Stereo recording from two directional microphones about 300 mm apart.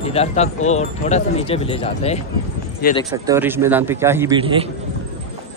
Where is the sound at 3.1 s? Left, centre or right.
Centre.